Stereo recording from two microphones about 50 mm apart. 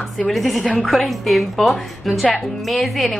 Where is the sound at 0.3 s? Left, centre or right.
Centre.